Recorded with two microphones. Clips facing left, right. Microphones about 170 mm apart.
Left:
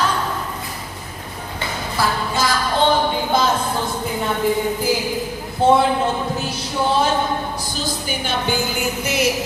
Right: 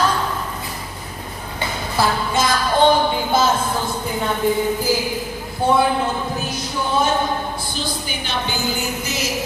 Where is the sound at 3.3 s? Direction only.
5° right (ahead or behind).